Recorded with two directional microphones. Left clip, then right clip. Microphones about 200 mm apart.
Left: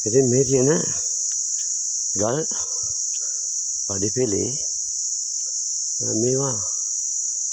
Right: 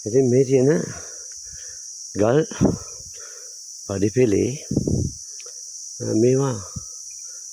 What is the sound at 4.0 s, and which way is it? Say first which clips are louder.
Speech: right 5 dB; 40° right (ahead or behind).